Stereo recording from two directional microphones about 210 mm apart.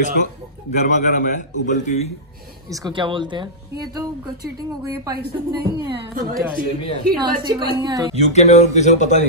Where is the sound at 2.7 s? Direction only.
20° right (ahead or behind).